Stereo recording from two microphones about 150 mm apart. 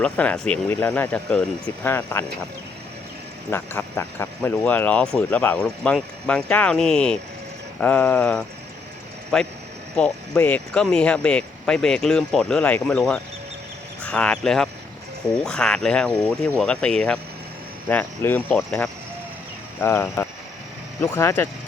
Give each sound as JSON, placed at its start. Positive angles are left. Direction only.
{"t": 0.0, "sound": "speech", "side_deg": 5}
{"t": 3.5, "sound": "speech", "side_deg": 15}